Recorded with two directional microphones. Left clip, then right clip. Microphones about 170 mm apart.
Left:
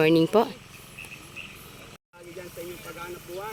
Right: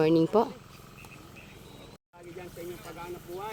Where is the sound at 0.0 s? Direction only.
Centre (ahead or behind).